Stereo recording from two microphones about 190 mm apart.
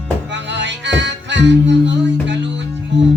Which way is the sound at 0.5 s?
70° right (ahead or behind).